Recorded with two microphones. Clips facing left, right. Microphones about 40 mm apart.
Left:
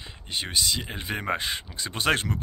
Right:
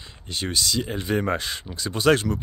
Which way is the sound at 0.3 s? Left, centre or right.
Left.